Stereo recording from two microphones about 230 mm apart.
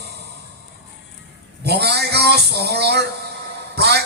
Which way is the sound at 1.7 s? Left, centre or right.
Right.